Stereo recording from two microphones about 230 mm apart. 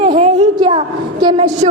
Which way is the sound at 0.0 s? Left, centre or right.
Right.